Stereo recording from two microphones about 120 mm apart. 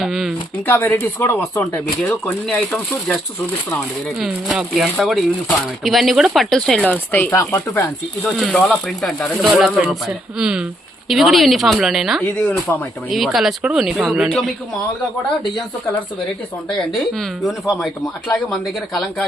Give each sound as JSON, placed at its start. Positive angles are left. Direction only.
{"t": 0.0, "sound": "speech", "side_deg": 0}
{"t": 0.7, "sound": "speech", "side_deg": 20}
{"t": 4.2, "sound": "speech", "side_deg": 0}
{"t": 8.2, "sound": "speech", "side_deg": 0}
{"t": 16.6, "sound": "speech", "side_deg": 5}